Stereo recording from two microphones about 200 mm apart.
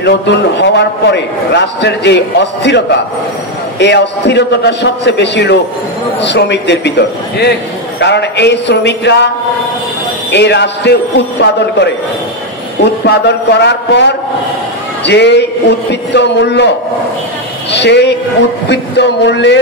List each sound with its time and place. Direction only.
0.0 s a man's voice: 60° left (ahead or behind)
10.3 s a man's voice: 60° left (ahead or behind)